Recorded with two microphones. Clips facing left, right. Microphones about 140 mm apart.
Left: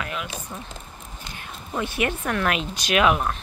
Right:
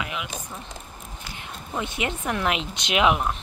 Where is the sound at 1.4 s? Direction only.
20° right (ahead or behind).